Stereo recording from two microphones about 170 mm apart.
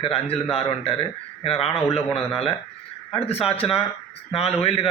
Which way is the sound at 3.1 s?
35° left (ahead or behind).